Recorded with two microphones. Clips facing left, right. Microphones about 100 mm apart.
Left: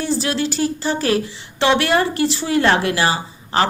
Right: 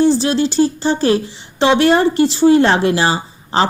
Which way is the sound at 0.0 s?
25° right (ahead or behind).